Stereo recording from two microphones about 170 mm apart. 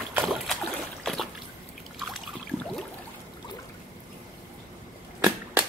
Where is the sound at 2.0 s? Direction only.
Centre (ahead or behind).